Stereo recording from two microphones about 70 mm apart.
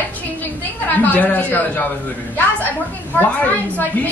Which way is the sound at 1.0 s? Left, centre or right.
Left.